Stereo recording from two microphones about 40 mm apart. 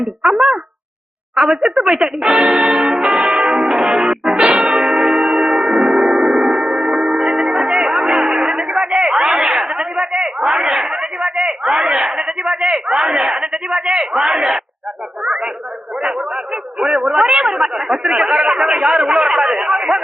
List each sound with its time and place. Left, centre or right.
0.2 s speech: centre
1.6 s speech: right
2.4 s speech: centre
3.2 s music: centre
4.8 s gong: centre
6.5 s music: centre
8.5 s music: right
8.9 s a sound: centre
10.8 s speech: centre
15.2 s speech: right
19.3 s speech: centre